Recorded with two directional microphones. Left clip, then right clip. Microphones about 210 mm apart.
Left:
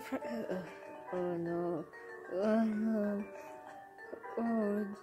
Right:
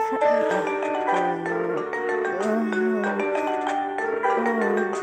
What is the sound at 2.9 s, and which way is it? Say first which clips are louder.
Music: right 15 dB; 30° right (ahead or behind).